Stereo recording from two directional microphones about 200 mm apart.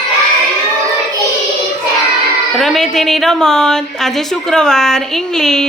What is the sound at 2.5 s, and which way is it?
A woman's voice, centre (ahead or behind).